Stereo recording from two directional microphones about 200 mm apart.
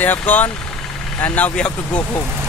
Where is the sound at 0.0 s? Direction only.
10° left (ahead or behind).